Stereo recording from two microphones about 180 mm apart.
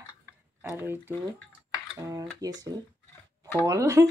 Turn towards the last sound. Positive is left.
turn(degrees=-15)  # may be behind; listen again after turning